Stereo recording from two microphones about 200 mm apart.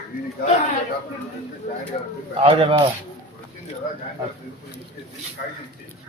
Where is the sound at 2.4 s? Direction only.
25° right (ahead or behind).